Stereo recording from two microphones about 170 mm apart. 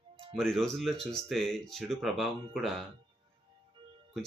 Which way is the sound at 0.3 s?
Centre (ahead or behind).